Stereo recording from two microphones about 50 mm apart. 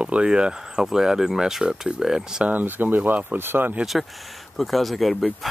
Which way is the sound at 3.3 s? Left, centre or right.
Right.